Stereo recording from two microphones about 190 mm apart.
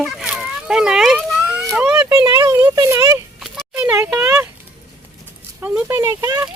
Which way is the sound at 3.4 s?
5° right (ahead or behind).